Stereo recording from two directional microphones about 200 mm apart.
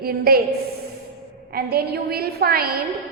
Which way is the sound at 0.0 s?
50° right (ahead or behind).